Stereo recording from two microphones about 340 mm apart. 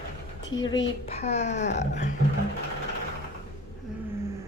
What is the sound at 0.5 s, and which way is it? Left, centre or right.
Speech, left.